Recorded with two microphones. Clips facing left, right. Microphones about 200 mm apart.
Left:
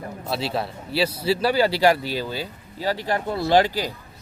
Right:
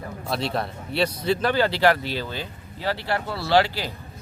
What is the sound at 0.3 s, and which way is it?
Speech, 5° left (ahead or behind).